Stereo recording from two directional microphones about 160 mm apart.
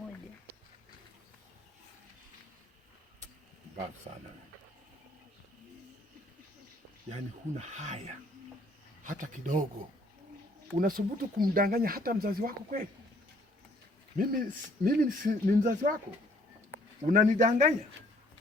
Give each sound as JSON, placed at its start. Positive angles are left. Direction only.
{"t": 4.1, "sound": "speech", "side_deg": -40}
{"t": 7.6, "sound": "a man's voice", "side_deg": -45}
{"t": 10.8, "sound": "speech", "side_deg": -65}
{"t": 14.2, "sound": "speech", "side_deg": -60}
{"t": 17.1, "sound": "a man's voice", "side_deg": -55}